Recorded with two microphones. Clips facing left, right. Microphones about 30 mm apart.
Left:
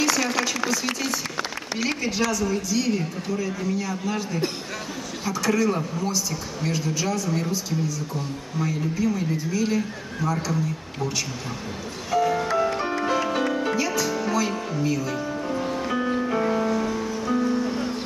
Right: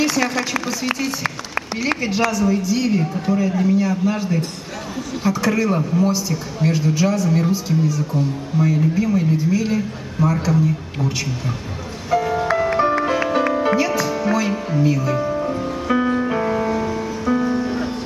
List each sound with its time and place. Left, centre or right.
0.3 s speech: centre
12.1 s music: centre